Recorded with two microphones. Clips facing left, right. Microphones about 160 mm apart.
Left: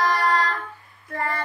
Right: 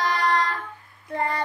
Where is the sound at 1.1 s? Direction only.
20° right (ahead or behind).